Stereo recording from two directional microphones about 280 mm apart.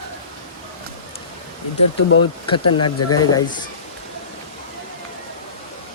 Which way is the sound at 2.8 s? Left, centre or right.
Left.